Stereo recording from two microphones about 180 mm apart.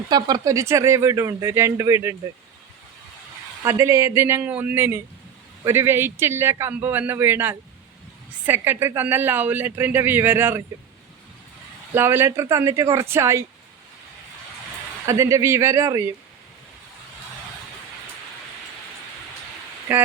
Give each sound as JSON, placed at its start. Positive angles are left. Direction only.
{"t": 0.1, "sound": "speech", "side_deg": -20}
{"t": 3.6, "sound": "speech", "side_deg": -15}
{"t": 11.9, "sound": "speech", "side_deg": -15}
{"t": 15.0, "sound": "speech", "side_deg": -15}
{"t": 19.9, "sound": "speech", "side_deg": -10}